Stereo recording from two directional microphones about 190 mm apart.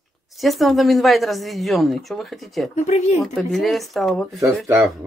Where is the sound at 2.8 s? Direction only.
40° left (ahead or behind).